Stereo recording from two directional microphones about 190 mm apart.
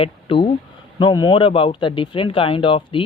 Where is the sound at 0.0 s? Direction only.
30° left (ahead or behind).